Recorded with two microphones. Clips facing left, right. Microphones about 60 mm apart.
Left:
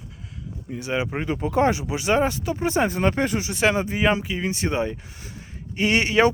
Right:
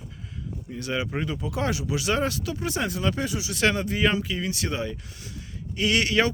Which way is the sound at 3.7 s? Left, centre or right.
Left.